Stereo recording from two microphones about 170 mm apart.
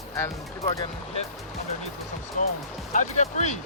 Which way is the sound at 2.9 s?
45° left (ahead or behind).